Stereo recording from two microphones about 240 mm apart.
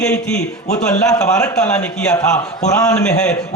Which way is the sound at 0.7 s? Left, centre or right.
Left.